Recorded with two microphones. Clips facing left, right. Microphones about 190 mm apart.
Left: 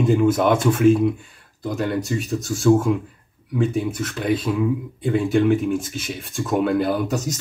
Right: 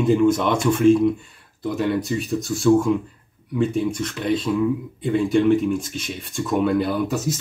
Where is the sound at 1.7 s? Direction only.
50° left (ahead or behind).